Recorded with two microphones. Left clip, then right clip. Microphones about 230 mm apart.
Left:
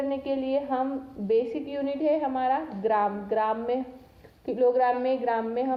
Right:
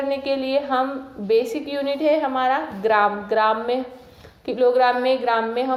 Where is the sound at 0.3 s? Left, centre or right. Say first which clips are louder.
Right 6 dB; centre.